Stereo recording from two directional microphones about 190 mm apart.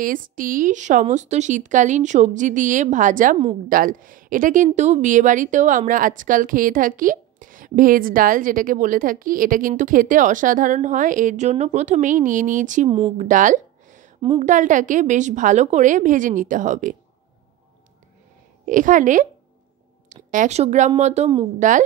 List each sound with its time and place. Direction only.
0.0 s a woman's voice: 45° right (ahead or behind)
13.2 s a sound: 40° right (ahead or behind)
14.4 s a woman's voice: 40° right (ahead or behind)
18.7 s a woman's voice: 45° right (ahead or behind)